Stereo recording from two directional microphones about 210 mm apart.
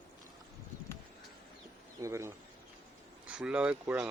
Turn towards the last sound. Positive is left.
turn(degrees=-5)  # may be behind; listen again after turning